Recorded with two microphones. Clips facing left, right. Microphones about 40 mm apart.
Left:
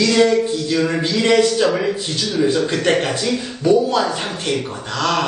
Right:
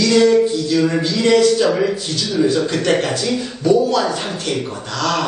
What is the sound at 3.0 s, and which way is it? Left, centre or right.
A man's voice, centre.